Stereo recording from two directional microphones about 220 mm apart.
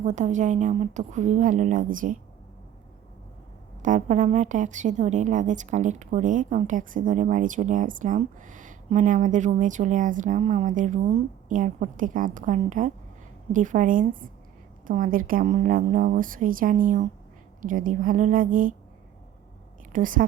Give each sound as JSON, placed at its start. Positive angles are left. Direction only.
{"t": 0.0, "sound": "a woman's voice", "side_deg": -35}
{"t": 3.8, "sound": "a woman's voice", "side_deg": -35}
{"t": 19.9, "sound": "a woman's voice", "side_deg": -35}